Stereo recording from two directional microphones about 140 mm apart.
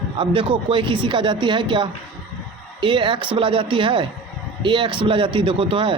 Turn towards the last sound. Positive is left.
turn(degrees=-40)  # may be behind; listen again after turning